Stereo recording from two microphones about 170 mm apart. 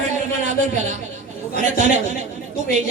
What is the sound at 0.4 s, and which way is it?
Speech, 45° right (ahead or behind).